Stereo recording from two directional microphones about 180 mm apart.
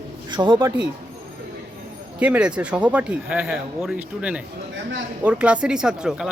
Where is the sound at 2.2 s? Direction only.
5° right (ahead or behind).